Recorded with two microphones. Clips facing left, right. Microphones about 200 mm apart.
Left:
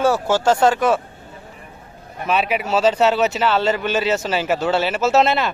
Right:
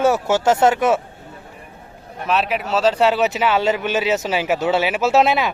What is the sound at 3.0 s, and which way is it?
Speech, 10° right (ahead or behind).